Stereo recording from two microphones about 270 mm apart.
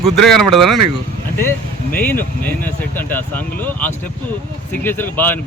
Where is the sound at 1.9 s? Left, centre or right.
Centre.